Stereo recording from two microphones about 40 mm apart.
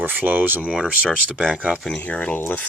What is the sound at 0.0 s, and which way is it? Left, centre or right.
Speech, right.